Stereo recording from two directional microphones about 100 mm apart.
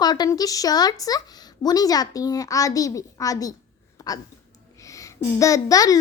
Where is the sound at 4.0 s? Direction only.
40° left (ahead or behind).